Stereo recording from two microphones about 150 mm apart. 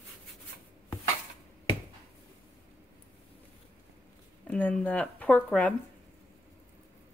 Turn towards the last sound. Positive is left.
turn(degrees=10)  # may be behind; listen again after turning